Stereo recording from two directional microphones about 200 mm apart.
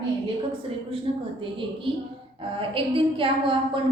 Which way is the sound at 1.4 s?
25° right (ahead or behind).